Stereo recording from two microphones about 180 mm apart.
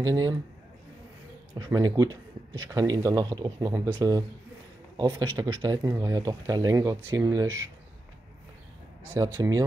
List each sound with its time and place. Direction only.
0.0 s speech: 20° right (ahead or behind)
1.5 s speech: 20° right (ahead or behind)
4.9 s speech: 25° right (ahead or behind)
9.1 s speech: 20° right (ahead or behind)